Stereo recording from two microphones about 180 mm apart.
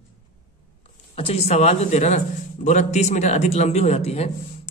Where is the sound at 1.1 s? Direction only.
35° left (ahead or behind).